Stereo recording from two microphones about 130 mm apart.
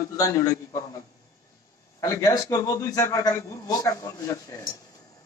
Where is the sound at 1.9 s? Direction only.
25° left (ahead or behind).